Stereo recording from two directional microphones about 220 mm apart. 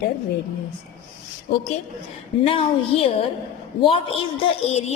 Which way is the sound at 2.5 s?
25° left (ahead or behind).